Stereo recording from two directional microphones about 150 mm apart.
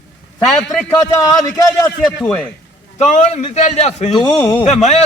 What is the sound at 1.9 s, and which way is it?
Speech, 5° left (ahead or behind).